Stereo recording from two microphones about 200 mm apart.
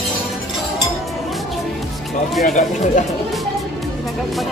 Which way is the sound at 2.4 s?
40° left (ahead or behind).